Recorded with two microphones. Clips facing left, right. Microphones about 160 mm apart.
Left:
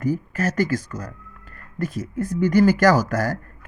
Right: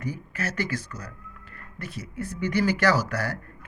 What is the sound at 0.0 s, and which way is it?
Speech, 45° left (ahead or behind).